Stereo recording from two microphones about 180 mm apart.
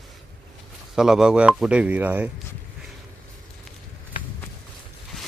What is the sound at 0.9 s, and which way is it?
Speech, 5° right (ahead or behind).